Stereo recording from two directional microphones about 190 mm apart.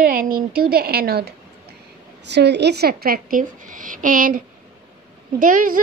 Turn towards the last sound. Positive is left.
turn(degrees=-45)  # may be behind; listen again after turning